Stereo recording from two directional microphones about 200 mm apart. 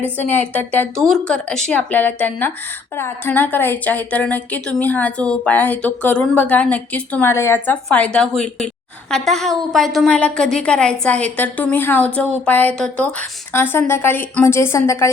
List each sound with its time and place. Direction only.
0.2 s a woman's voice: 10° left (ahead or behind)